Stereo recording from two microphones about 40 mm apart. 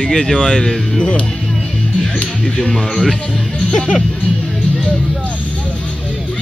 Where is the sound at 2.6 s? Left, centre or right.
Centre.